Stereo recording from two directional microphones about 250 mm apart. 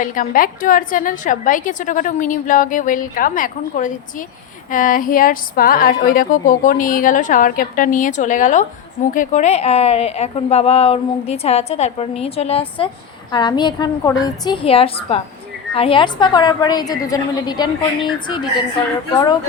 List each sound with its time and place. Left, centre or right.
0.0 s a woman's voice: left